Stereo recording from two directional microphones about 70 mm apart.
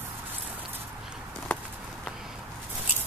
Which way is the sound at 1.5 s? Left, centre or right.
Centre.